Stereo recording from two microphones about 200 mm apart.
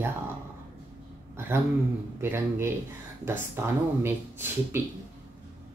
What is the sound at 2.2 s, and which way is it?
Speech, 10° right (ahead or behind).